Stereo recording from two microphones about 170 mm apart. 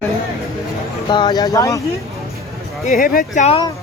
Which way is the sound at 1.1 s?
25° left (ahead or behind).